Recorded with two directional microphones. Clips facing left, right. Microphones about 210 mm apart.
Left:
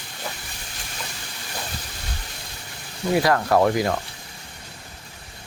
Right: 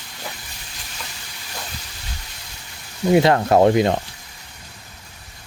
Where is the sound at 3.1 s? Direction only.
25° right (ahead or behind).